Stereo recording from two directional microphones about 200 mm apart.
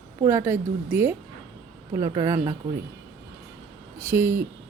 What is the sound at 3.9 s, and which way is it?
Speech, 10° right (ahead or behind).